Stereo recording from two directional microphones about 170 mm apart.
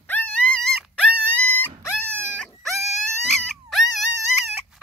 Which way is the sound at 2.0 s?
15° right (ahead or behind).